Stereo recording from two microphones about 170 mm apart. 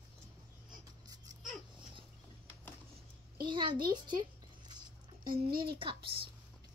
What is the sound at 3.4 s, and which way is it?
Speech, 30° right (ahead or behind).